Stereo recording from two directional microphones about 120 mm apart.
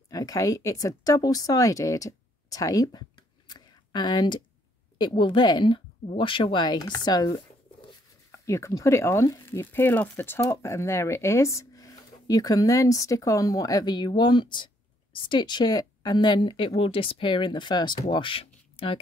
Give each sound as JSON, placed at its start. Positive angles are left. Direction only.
{"t": 0.1, "sound": "a woman's voice", "side_deg": 30}